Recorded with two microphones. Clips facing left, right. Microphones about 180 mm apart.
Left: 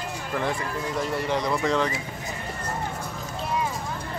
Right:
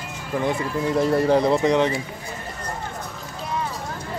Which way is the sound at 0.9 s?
35° right (ahead or behind).